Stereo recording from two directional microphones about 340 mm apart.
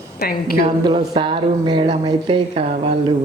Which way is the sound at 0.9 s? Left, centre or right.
Centre.